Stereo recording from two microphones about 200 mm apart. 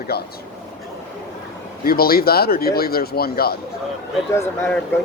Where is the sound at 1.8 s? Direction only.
50° left (ahead or behind).